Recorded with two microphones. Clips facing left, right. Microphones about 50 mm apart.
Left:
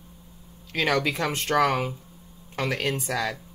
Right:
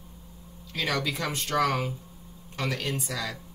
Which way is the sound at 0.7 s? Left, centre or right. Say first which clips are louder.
Left 5 dB; left.